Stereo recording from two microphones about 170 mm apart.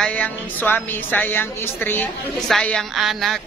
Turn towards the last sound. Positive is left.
turn(degrees=0)  # may be behind; listen again after turning